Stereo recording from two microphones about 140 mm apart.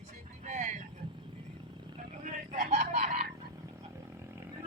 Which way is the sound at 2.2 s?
60° right (ahead or behind).